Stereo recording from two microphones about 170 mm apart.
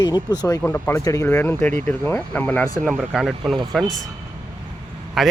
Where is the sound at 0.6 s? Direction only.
10° left (ahead or behind).